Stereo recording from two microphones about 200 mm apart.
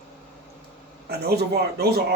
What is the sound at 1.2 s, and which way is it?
Speech, 55° right (ahead or behind).